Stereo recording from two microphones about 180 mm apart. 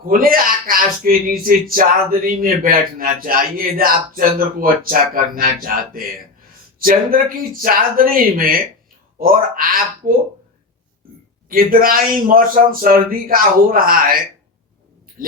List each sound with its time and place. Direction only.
0.0 s speech: 50° right (ahead or behind)
11.4 s speech: 50° right (ahead or behind)